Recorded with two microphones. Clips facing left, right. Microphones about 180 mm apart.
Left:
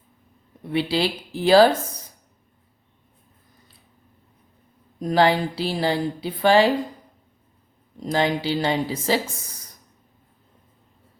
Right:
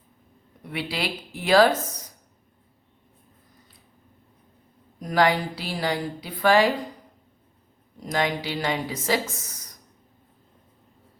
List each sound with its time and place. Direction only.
0.7 s a woman's voice: 30° left (ahead or behind)
4.9 s a woman's voice: 25° left (ahead or behind)
8.0 s a woman's voice: 30° left (ahead or behind)